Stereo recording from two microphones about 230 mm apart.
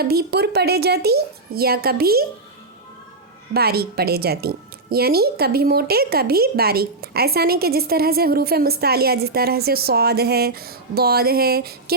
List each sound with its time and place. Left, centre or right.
0.0 s a woman's voice: right
3.5 s a woman's voice: right